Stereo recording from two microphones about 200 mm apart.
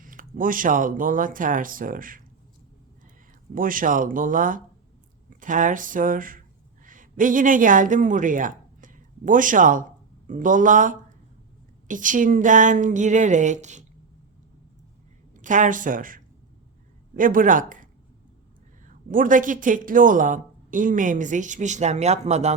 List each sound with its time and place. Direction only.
0.0 s speech: 45° right (ahead or behind)
3.5 s a woman's voice: 45° right (ahead or behind)
15.4 s speech: 40° right (ahead or behind)
18.9 s speech: 45° right (ahead or behind)